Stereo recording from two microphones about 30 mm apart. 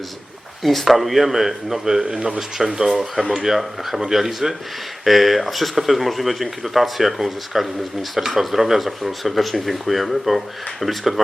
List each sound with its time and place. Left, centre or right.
0.6 s speech: centre; by 3.0 s right
3.3 s speech: centre